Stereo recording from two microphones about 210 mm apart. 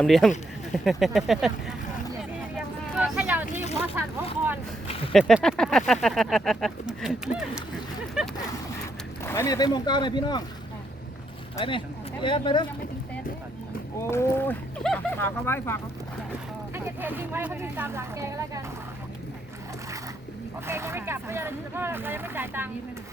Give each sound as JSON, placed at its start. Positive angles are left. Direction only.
{"t": 0.0, "sound": "speech", "side_deg": 0}
{"t": 2.6, "sound": "a sound", "side_deg": -5}
{"t": 3.4, "sound": "a sound", "side_deg": 35}
{"t": 5.1, "sound": "speech", "side_deg": 0}
{"t": 9.2, "sound": "speech", "side_deg": 15}
{"t": 11.5, "sound": "speech", "side_deg": 25}
{"t": 14.1, "sound": "speech", "side_deg": 10}
{"t": 16.7, "sound": "speech", "side_deg": -10}
{"t": 20.7, "sound": "speech", "side_deg": -10}